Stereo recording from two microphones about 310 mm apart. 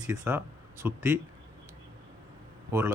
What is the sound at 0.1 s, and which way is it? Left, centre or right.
Speech, centre.